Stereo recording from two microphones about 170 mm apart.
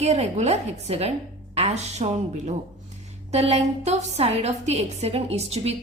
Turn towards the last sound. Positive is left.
turn(degrees=-40)  # may be behind; listen again after turning